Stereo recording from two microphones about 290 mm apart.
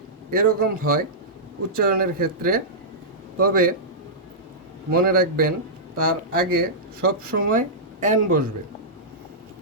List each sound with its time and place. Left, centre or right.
0.3 s speech: right
4.9 s speech: right